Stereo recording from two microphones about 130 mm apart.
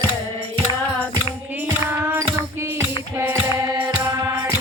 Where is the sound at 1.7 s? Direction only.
20° right (ahead or behind).